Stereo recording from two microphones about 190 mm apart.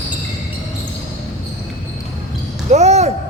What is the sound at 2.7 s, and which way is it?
Speech, 35° right (ahead or behind).